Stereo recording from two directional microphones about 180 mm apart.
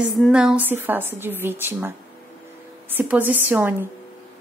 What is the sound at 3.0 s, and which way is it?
Speech, 10° right (ahead or behind).